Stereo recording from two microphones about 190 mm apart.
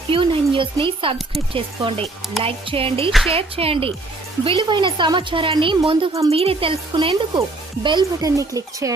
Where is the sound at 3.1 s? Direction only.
Centre (ahead or behind).